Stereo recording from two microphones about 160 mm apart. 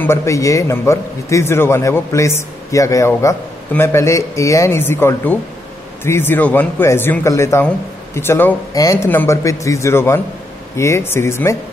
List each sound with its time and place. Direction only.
0.0 s a man's voice: 15° left (ahead or behind)